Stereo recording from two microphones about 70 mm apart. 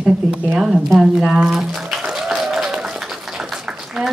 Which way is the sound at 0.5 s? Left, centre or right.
Centre.